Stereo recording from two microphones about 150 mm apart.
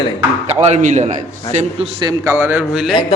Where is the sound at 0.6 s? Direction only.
50° right (ahead or behind).